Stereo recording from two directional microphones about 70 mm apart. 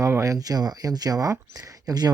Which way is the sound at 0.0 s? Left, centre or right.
Right.